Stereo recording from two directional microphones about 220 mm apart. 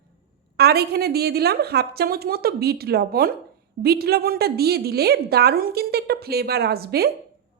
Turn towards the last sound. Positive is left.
turn(degrees=-45)  # may be behind; listen again after turning